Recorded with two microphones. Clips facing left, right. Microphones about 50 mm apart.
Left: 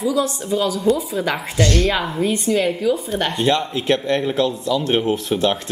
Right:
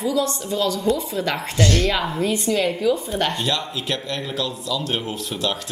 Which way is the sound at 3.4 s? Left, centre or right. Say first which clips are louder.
Left 6 dB; left.